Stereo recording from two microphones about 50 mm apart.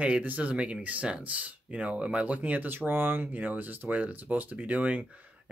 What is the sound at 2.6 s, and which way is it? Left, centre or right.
Speech, right.